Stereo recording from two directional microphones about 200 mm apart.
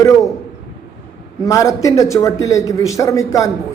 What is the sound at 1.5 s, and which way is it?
A man's voice, 15° left (ahead or behind).